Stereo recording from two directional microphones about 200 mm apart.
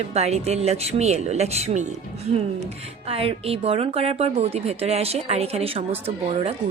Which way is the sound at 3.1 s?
30° right (ahead or behind).